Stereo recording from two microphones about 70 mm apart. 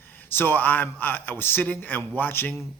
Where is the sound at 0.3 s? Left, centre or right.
Left.